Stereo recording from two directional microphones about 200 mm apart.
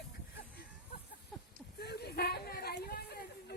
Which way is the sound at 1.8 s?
55° left (ahead or behind).